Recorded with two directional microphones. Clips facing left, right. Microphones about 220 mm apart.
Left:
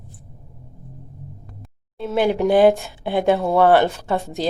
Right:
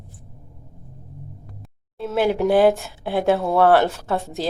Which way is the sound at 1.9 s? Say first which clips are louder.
Left 1 dB; centre (ahead or behind).